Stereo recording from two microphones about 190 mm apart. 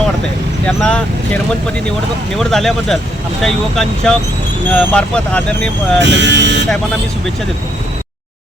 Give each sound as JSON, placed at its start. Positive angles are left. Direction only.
{"t": 0.6, "sound": "speech", "side_deg": 5}
{"t": 2.4, "sound": "speech", "side_deg": 0}
{"t": 6.0, "sound": "speech", "side_deg": -70}